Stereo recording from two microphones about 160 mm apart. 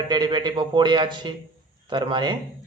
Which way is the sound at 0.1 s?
25° right (ahead or behind).